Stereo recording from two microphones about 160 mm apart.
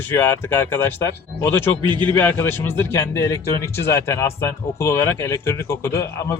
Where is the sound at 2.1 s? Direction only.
10° left (ahead or behind).